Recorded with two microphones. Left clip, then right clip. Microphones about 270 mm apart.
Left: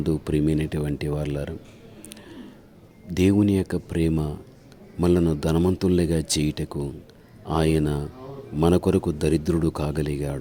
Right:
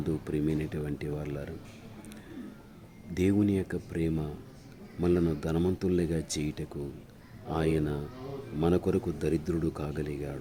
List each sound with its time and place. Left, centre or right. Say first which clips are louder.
0.0 s speech: left 8 dB; left
3.2 s speech: left 7 dB; left